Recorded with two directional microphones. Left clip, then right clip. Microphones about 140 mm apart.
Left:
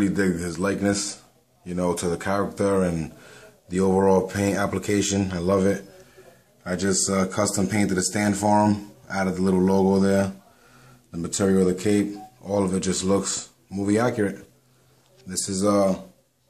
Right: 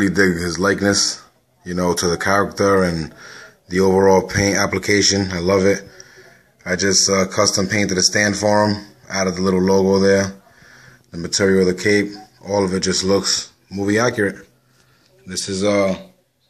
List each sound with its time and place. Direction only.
0.0 s speech: 25° right (ahead or behind); by 16.0 s 5° right (ahead or behind)